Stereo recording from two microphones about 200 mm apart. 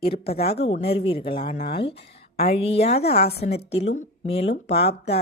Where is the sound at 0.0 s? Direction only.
30° left (ahead or behind).